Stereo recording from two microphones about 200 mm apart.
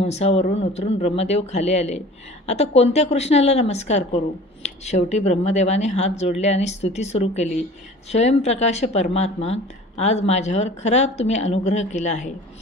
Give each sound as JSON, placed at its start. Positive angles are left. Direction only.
{"t": 0.0, "sound": "speech", "side_deg": 30}